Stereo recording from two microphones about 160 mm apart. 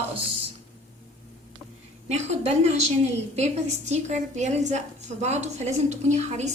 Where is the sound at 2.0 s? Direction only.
45° right (ahead or behind).